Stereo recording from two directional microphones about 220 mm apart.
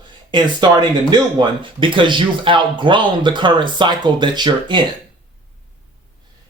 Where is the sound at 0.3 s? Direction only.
20° right (ahead or behind).